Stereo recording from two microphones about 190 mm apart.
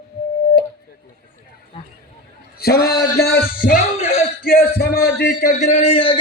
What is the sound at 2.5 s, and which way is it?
A man's voice, 55° left (ahead or behind).